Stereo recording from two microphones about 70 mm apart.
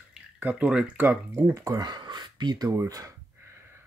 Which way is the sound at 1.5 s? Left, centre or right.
Right.